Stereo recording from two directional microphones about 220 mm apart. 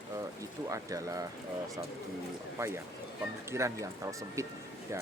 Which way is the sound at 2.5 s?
10° right (ahead or behind).